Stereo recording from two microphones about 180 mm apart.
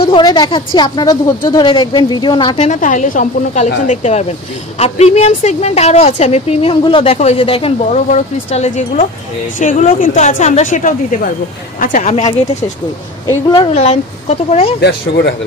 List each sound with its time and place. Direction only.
0.1 s a woman's voice: 25° left (ahead or behind)
2.7 s a woman's voice: 45° left (ahead or behind)
14.8 s speech: 65° left (ahead or behind)